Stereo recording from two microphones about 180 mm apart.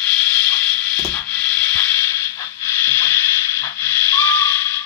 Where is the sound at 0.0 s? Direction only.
5° left (ahead or behind).